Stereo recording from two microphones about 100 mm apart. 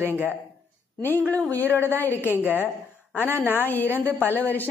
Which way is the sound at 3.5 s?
20° left (ahead or behind).